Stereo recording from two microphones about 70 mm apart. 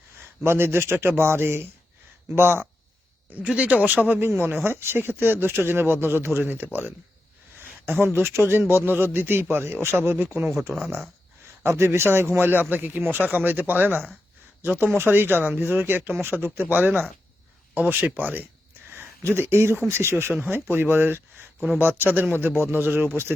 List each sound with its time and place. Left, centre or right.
0.2 s speech: right
3.4 s a man's voice: centre
7.9 s speech: right
11.6 s a man's voice: right
16.7 s a man's voice: centre
19.2 s a man's voice: right